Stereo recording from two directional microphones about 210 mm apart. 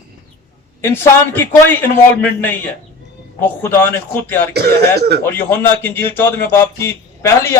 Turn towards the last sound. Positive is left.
turn(degrees=10)  # may be behind; listen again after turning